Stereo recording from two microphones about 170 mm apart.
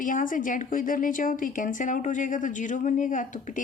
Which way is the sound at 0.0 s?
50° left (ahead or behind).